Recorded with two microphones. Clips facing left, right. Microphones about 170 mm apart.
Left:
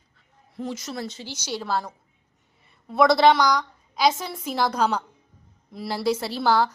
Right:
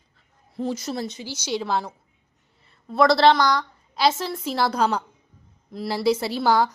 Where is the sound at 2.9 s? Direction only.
15° left (ahead or behind).